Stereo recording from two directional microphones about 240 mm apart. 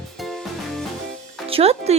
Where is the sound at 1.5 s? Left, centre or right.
Right.